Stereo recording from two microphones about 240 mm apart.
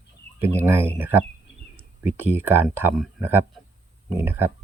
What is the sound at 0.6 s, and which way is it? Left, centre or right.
Speech, centre.